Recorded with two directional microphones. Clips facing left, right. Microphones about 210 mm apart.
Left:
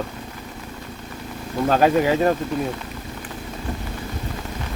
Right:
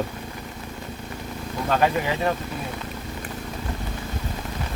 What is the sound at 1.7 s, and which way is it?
Speech, 40° left (ahead or behind).